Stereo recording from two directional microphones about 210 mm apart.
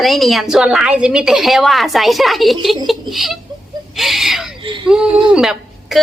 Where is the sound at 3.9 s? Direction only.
Centre (ahead or behind).